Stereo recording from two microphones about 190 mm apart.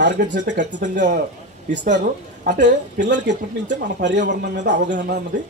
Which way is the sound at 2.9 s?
65° right (ahead or behind).